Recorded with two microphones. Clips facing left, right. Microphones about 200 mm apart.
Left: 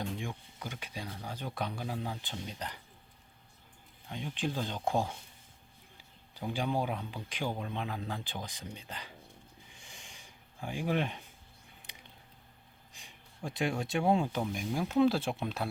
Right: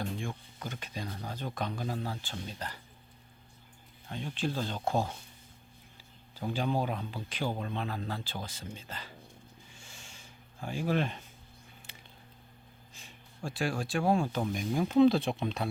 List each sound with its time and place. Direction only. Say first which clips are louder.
0.2 s speech: right 1 dB; 15° left (ahead or behind)
4.1 s speech: right 1 dB; 15° left (ahead or behind)
6.3 s a man's voice: right 2 dB; 15° left (ahead or behind)
9.7 s a sound: right 1 dB; 15° left (ahead or behind)
12.9 s speech: right 1 dB; 15° left (ahead or behind)
14.4 s speech: right 3 dB; 5° left (ahead or behind)